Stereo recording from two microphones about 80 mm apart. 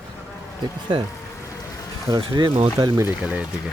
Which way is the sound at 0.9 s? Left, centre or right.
Right.